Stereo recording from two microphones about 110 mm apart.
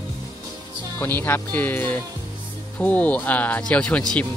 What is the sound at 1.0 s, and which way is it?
Speech, 20° left (ahead or behind).